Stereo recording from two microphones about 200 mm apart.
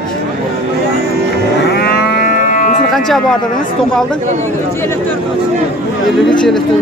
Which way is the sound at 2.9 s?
Centre (ahead or behind).